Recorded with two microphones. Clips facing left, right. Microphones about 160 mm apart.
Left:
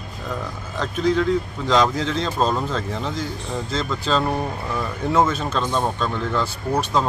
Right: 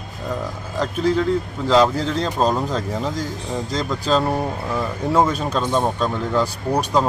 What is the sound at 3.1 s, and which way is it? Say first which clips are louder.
Speech: right 2 dB; 40° right (ahead or behind).